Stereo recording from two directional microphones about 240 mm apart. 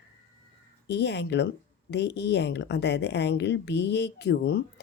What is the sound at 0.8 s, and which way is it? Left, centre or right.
Speech, left.